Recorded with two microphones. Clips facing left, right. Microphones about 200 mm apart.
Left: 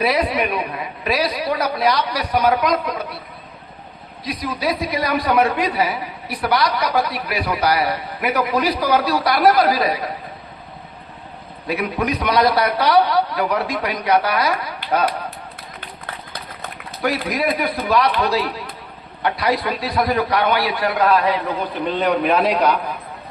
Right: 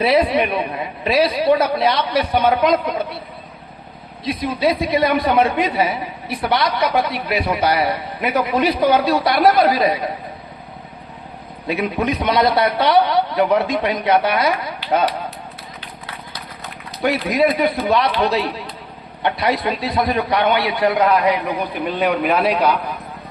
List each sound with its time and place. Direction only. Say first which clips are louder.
0.0 s a man's voice: right 3 dB; 25° right (ahead or behind)
4.2 s a man's voice: right 5 dB; 25° right (ahead or behind)
11.7 s a man's voice: right 1 dB; 25° right (ahead or behind)
17.0 s a man's voice: right 4 dB; 25° right (ahead or behind); by 22.8 s 5° right (ahead or behind)